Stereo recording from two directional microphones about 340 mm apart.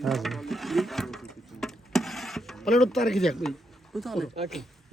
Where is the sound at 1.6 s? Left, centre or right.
Centre.